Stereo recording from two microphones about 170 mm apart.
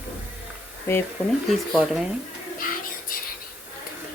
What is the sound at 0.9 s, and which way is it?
Speech, 15° left (ahead or behind).